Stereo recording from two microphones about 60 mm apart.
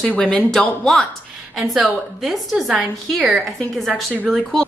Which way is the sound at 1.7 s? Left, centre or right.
Centre.